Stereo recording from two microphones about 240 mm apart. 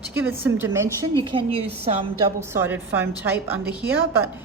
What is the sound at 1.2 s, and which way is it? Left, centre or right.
Speech, right.